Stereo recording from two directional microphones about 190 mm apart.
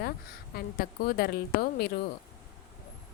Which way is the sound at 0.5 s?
50° left (ahead or behind).